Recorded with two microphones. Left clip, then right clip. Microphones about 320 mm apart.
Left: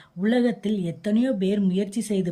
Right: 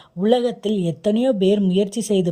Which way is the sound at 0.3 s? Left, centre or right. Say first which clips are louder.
Right 5 dB; centre.